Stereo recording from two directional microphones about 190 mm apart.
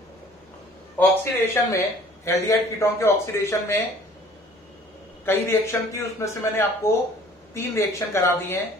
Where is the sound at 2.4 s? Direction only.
15° left (ahead or behind).